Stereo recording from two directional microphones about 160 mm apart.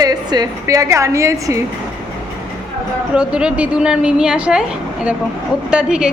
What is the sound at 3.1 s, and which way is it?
A woman's voice, 5° right (ahead or behind).